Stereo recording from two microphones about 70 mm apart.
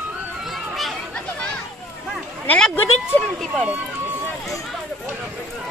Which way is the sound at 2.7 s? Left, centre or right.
Left.